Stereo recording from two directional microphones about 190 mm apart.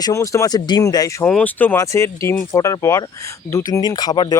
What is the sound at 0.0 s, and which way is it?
Speech, 15° left (ahead or behind).